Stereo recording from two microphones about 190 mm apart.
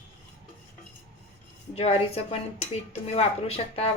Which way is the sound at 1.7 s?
30° left (ahead or behind).